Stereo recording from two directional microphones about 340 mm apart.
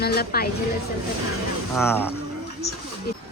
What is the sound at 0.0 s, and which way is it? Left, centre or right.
Speech, left.